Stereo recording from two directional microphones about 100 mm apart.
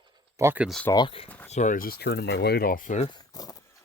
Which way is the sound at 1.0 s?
65° left (ahead or behind).